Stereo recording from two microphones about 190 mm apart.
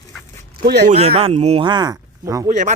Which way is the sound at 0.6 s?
60° right (ahead or behind).